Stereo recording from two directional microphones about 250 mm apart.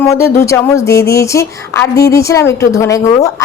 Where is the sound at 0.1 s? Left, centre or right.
Centre.